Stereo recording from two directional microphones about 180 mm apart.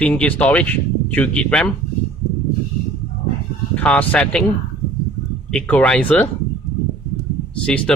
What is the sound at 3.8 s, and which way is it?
Speech, 10° left (ahead or behind).